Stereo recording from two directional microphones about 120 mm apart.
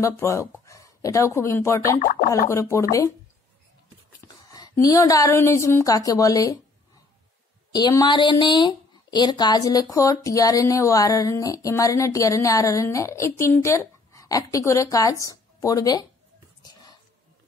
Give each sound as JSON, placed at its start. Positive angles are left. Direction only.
{"t": 0.0, "sound": "speech", "side_deg": 25}
{"t": 4.2, "sound": "a woman's voice", "side_deg": 30}
{"t": 7.7, "sound": "speech", "side_deg": 35}